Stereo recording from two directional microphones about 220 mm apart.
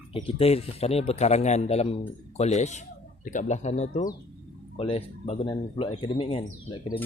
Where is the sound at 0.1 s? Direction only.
25° left (ahead or behind).